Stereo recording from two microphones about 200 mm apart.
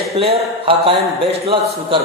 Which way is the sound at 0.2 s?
25° right (ahead or behind).